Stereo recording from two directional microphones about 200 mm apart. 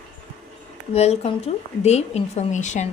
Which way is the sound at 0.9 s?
30° left (ahead or behind).